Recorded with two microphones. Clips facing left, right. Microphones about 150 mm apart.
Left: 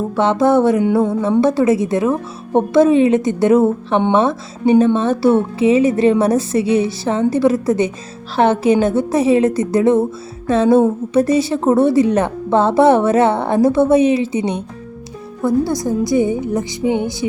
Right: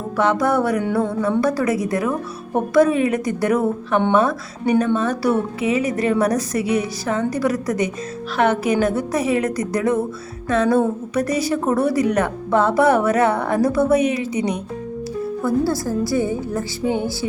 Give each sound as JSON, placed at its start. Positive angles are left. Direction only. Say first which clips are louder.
{"t": 0.2, "sound": "a woman's voice", "louder": "left 5 dB", "side_deg": 25}